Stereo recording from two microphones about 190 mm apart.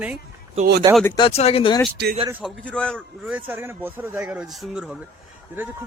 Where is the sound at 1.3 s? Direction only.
30° left (ahead or behind).